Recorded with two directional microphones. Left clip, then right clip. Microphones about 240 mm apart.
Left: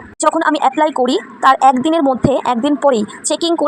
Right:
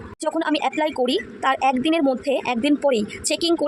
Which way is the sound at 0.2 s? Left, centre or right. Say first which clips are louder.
Left 9 dB; centre.